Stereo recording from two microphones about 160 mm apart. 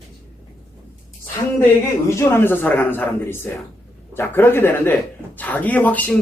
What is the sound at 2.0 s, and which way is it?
A man's voice, 15° left (ahead or behind).